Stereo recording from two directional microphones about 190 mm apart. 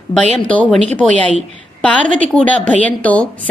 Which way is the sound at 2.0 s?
40° right (ahead or behind).